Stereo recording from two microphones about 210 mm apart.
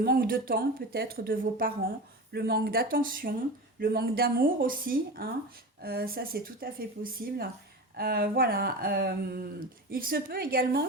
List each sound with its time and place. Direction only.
0.0 s speech: 45° right (ahead or behind)